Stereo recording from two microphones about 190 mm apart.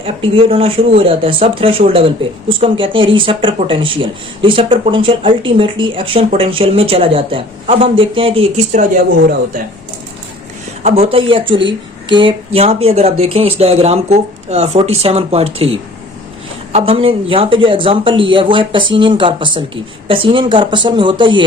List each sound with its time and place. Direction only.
0.0 s speech: 30° right (ahead or behind)
10.8 s speech: 30° right (ahead or behind)